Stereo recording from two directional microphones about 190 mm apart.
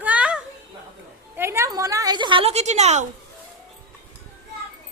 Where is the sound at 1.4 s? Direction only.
15° right (ahead or behind); by 3.1 s 35° right (ahead or behind).